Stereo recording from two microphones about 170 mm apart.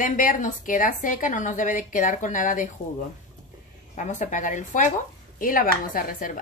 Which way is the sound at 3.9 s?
45° left (ahead or behind).